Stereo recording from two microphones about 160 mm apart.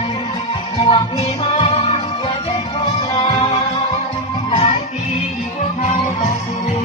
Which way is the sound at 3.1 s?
25° left (ahead or behind).